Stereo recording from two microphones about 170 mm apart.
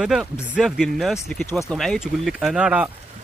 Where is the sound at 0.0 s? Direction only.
5° right (ahead or behind).